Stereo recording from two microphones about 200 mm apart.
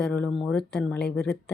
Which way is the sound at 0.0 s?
5° left (ahead or behind).